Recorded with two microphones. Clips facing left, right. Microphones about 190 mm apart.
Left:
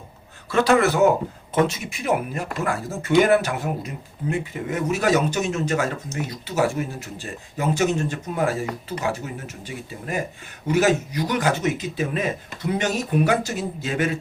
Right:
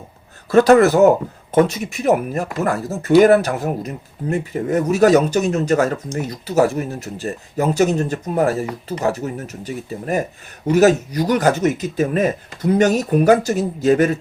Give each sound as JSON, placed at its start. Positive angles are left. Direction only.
{"t": 0.5, "sound": "speech", "side_deg": -40}